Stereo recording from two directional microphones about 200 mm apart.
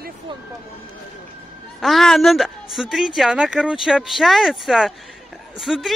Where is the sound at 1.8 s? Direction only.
Centre (ahead or behind).